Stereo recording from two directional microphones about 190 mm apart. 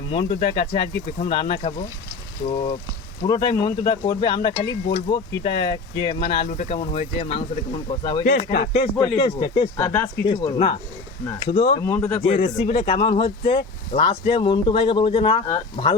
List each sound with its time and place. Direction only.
0.1 s speech: 30° left (ahead or behind)
8.2 s speech: 45° left (ahead or behind)
9.0 s speech: 25° left (ahead or behind)
9.8 s speech: 15° left (ahead or behind)
10.2 s speech: 30° left (ahead or behind)
11.8 s speech: 15° left (ahead or behind)
12.2 s speech: 35° left (ahead or behind)